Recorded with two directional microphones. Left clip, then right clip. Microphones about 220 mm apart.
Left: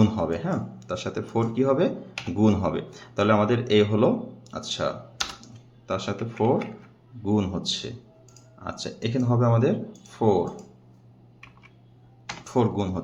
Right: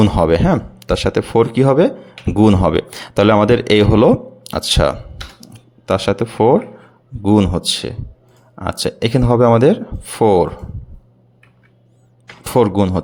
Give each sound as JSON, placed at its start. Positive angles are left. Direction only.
{"t": 0.0, "sound": "speech", "side_deg": -45}
{"t": 12.5, "sound": "speech", "side_deg": -45}